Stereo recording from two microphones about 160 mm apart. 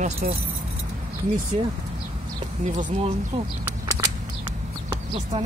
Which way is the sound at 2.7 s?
50° right (ahead or behind).